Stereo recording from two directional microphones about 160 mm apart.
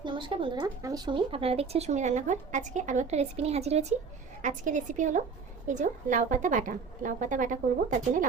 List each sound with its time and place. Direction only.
0.0 s speech: 30° right (ahead or behind); by 8.3 s 55° right (ahead or behind)